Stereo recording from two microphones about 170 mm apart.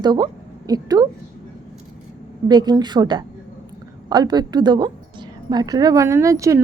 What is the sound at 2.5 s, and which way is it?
A woman's voice, 25° right (ahead or behind).